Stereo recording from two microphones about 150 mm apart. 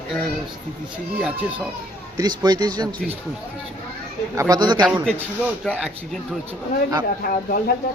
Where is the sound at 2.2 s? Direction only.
25° right (ahead or behind).